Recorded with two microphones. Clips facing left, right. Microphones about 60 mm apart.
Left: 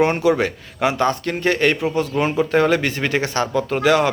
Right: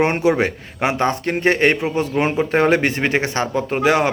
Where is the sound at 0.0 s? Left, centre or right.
Right.